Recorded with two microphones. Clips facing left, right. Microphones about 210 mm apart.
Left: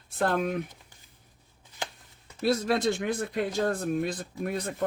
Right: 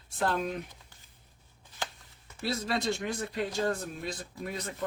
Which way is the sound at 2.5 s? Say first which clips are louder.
Left 6 dB; 55° left (ahead or behind).